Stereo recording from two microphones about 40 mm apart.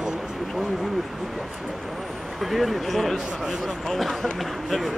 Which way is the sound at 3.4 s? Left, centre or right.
Centre.